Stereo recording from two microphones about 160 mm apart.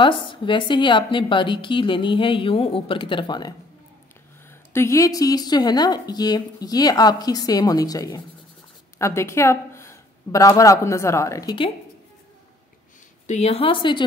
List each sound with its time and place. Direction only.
0.0 s a woman's voice: 30° left (ahead or behind)
4.7 s a woman's voice: 20° left (ahead or behind)
13.3 s a woman's voice: 40° left (ahead or behind)